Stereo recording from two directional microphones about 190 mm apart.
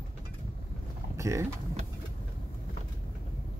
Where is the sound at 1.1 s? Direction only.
15° right (ahead or behind).